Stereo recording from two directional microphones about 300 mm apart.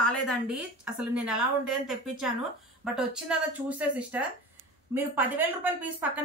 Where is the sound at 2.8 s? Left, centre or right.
Centre.